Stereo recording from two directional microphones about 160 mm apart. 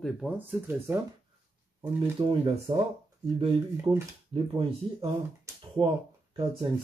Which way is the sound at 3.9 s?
35° right (ahead or behind).